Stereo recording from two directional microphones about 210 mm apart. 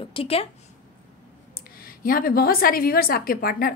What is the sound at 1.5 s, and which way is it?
A woman's voice, 45° left (ahead or behind).